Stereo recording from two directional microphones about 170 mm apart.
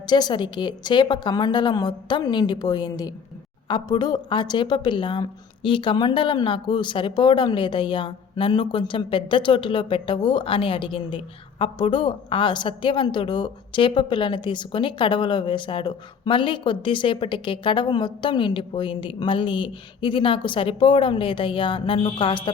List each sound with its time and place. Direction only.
0.1 s a woman's voice: 25° left (ahead or behind)